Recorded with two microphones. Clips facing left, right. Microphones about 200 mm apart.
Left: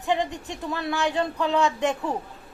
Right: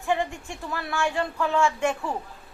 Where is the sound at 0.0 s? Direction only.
20° left (ahead or behind).